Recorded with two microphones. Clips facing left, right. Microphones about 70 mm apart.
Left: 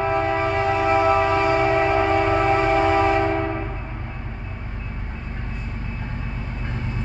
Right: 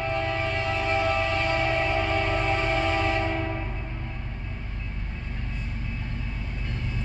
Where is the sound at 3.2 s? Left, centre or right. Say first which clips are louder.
Left 6 dB; left.